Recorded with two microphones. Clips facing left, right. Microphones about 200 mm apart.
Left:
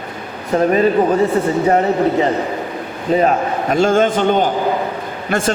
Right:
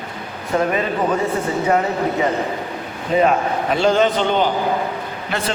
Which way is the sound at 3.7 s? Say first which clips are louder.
Left 3 dB; 50° left (ahead or behind).